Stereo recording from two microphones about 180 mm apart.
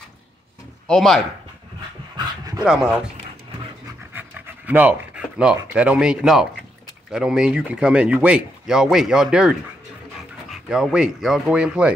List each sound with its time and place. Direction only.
0.8 s speech: 5° left (ahead or behind)
2.1 s dog: 20° right (ahead or behind)
2.6 s speech: 5° right (ahead or behind)
4.1 s pant: 10° right (ahead or behind)
5.6 s speech: 10° right (ahead or behind)